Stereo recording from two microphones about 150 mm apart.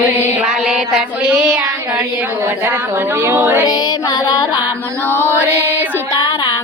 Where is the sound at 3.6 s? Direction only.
25° left (ahead or behind).